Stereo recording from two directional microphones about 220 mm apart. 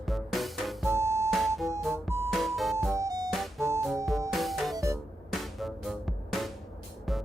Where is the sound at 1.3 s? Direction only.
Centre (ahead or behind).